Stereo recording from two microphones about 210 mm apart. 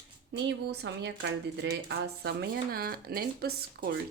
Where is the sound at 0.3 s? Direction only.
55° right (ahead or behind).